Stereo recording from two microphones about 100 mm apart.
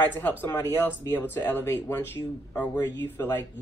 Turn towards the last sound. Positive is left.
turn(degrees=20)  # may be behind; listen again after turning